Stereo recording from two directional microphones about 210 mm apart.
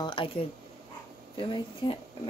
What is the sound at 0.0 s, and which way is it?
Speech, 25° left (ahead or behind).